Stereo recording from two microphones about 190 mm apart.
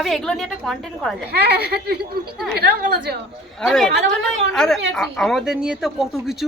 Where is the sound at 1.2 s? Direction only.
60° right (ahead or behind).